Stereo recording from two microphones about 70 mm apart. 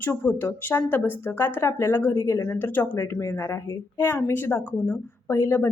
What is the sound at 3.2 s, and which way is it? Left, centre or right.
Speech, left.